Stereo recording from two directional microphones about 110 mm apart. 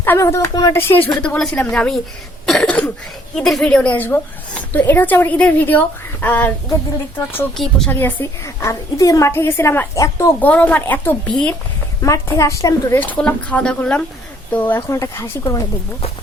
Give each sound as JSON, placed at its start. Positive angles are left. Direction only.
{"t": 0.0, "sound": "a woman's voice", "side_deg": 20}
{"t": 0.7, "sound": "a woman's voice", "side_deg": 20}
{"t": 7.5, "sound": "a woman's voice", "side_deg": 5}
{"t": 7.9, "sound": "a woman's voice", "side_deg": 20}
{"t": 10.4, "sound": "a woman's voice", "side_deg": 15}
{"t": 12.0, "sound": "a woman's voice", "side_deg": 30}
{"t": 12.9, "sound": "a woman's voice", "side_deg": 15}